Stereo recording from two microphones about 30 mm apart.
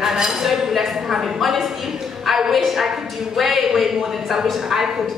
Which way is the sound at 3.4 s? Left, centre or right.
Centre.